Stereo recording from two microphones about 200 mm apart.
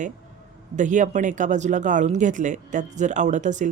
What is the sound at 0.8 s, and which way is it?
Speech, 40° right (ahead or behind).